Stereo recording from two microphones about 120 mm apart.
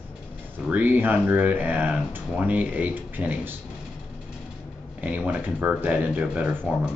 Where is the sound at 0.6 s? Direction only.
15° right (ahead or behind).